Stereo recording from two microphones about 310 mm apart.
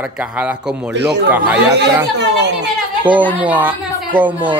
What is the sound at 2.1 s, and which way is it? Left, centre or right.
Speech, right.